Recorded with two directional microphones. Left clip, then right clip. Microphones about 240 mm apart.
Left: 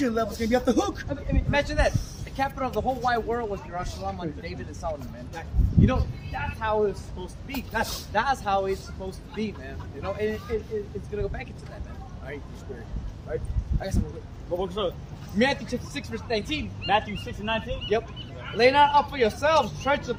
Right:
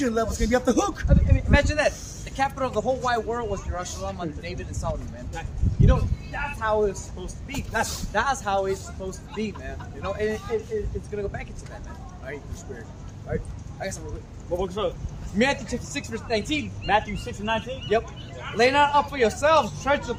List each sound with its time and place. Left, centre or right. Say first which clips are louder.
0.0 s speech: right 1 dB; centre
13.3 s speech: even; centre